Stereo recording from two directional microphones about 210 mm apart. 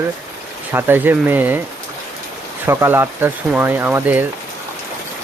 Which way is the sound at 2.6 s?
10° right (ahead or behind).